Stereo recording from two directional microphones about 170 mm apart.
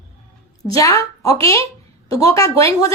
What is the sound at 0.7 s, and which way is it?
A woman's voice, 20° left (ahead or behind).